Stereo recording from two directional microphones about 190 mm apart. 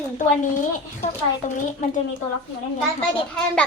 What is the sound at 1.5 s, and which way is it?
Speech, 40° left (ahead or behind).